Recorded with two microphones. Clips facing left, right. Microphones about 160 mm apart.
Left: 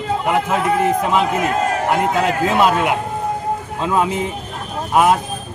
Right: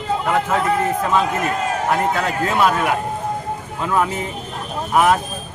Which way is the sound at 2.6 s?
20° left (ahead or behind).